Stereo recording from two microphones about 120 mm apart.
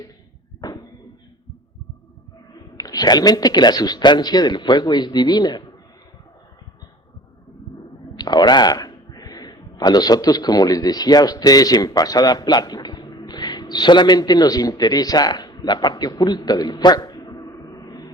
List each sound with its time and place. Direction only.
0.6 s a sound: 30° left (ahead or behind)
2.7 s speech: 30° left (ahead or behind)
8.1 s speech: 35° left (ahead or behind)